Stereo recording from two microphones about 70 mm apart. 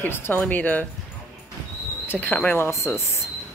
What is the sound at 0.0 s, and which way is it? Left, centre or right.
Speech, left.